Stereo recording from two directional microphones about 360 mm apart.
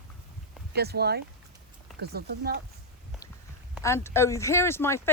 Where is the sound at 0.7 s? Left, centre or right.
Right.